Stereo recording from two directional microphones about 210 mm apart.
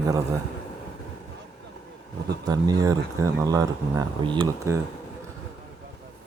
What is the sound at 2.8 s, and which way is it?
Speech, 15° right (ahead or behind).